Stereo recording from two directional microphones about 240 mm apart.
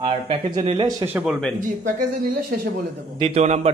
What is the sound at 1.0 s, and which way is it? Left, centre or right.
Speech, centre.